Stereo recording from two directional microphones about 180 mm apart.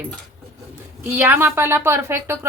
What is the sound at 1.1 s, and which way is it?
A woman's voice, 10° right (ahead or behind).